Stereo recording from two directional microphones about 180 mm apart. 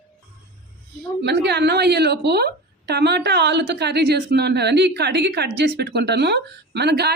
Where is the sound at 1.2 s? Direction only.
70° right (ahead or behind).